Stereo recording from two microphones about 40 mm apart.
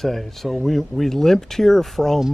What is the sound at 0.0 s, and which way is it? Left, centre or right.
Speech, centre.